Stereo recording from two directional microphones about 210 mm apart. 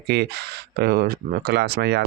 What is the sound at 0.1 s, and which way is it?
Speech, 50° right (ahead or behind).